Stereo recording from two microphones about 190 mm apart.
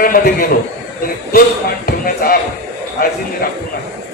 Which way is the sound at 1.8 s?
50° left (ahead or behind).